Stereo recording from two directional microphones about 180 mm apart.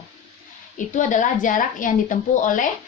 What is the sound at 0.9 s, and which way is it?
A woman's voice, 45° left (ahead or behind).